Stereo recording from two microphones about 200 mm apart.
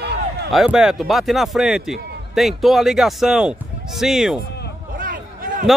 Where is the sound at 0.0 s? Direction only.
55° right (ahead or behind).